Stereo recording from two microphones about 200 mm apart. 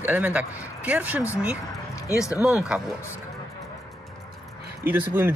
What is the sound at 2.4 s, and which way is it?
Speech, 5° right (ahead or behind).